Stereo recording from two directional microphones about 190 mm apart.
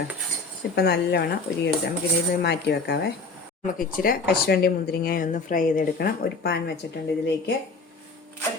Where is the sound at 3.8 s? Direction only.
50° left (ahead or behind).